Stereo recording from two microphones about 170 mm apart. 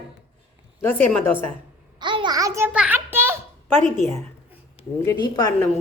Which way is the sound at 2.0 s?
25° right (ahead or behind).